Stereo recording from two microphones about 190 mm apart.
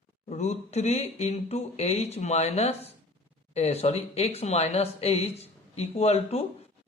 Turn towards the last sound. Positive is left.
turn(degrees=35)  # may be behind; listen again after turning